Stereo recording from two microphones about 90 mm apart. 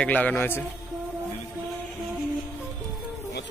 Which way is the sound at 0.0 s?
15° left (ahead or behind).